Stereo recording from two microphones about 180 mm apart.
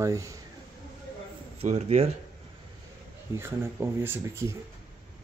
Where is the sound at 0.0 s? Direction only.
20° right (ahead or behind).